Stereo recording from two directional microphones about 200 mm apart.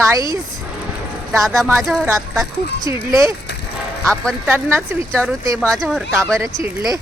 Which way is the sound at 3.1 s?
15° right (ahead or behind).